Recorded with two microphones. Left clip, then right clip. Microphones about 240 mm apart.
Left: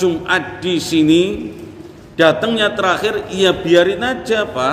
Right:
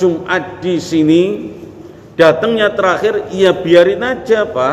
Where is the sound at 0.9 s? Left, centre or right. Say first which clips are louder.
Right 2 dB; left.